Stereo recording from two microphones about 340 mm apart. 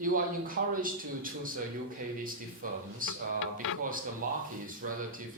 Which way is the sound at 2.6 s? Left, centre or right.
Right.